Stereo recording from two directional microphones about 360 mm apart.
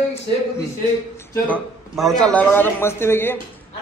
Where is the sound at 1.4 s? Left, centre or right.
Centre.